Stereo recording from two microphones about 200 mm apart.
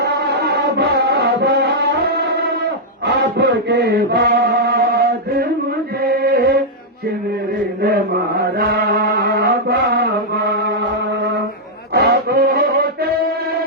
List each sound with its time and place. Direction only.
0.0 s music: 55° right (ahead or behind)
6.0 s chant: 50° right (ahead or behind)
8.4 s mantra: 50° right (ahead or behind)
11.9 s a sound: 50° right (ahead or behind)